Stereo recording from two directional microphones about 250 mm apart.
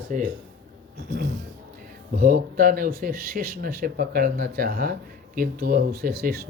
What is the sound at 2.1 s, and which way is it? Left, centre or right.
Speech, right.